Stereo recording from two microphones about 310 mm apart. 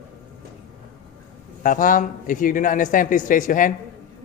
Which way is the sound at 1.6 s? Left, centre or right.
Left.